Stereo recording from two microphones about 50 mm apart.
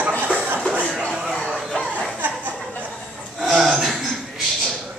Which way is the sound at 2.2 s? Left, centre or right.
Right.